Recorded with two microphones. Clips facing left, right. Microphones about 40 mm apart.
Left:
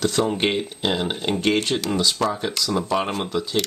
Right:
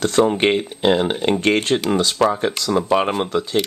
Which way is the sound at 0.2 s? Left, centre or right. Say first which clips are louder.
Right 9 dB; right.